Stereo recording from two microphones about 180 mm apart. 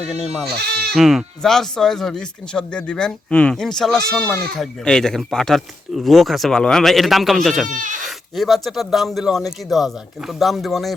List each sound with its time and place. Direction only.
0.1 s speech: centre (ahead or behind)
0.4 s speech: 60° right (ahead or behind)
0.9 s speech: centre (ahead or behind)
7.7 s speech: 45° right (ahead or behind)
8.0 s speech: centre (ahead or behind)